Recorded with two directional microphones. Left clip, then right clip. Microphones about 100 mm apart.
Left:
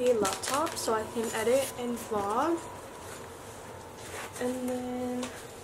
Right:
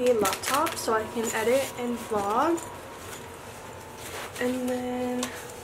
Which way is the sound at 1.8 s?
5° left (ahead or behind).